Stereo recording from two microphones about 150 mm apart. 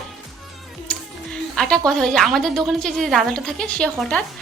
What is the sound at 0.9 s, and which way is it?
Music, 5° left (ahead or behind).